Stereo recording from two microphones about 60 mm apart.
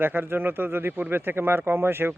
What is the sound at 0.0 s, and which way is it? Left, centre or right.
A man's voice, right.